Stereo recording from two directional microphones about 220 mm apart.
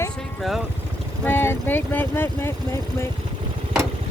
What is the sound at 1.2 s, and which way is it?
Speech, 10° left (ahead or behind).